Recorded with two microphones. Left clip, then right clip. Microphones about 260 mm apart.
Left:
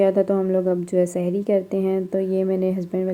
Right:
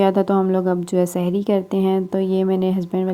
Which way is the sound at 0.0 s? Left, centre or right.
Right.